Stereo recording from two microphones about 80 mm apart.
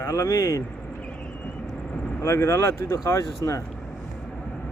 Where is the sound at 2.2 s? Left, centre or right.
Left.